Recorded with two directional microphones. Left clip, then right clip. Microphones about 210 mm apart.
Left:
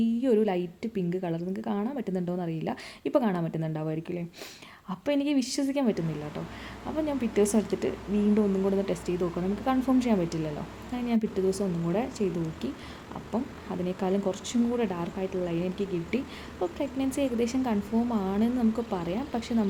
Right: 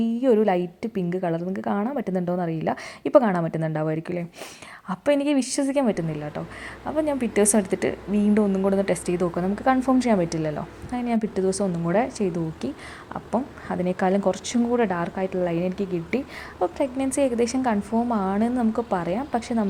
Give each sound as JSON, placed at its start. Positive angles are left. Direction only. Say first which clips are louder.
{"t": 0.0, "sound": "a woman's voice", "louder": "right 5 dB", "side_deg": -10}